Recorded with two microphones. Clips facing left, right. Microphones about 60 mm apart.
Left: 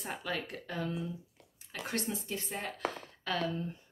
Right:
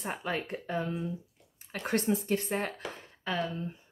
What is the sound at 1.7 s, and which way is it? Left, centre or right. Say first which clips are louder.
Speech: right 7 dB; right.